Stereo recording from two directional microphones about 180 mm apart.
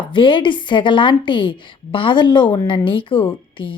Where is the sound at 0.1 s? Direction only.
25° left (ahead or behind).